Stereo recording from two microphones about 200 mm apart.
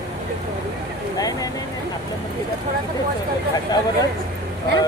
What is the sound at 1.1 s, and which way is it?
Vehicle, 20° left (ahead or behind).